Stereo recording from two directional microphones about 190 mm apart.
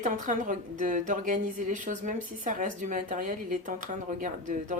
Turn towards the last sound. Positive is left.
turn(degrees=-40)  # may be behind; listen again after turning